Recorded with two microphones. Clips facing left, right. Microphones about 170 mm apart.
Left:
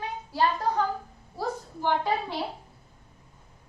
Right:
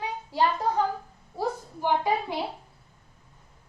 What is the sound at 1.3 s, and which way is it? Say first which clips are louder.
A woman's voice: right 2 dB; 15° right (ahead or behind).